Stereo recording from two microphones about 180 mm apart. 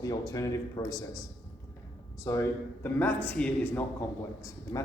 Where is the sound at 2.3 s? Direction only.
15° left (ahead or behind).